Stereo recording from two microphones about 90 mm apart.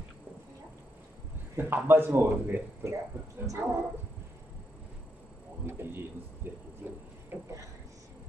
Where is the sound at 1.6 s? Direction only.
25° right (ahead or behind).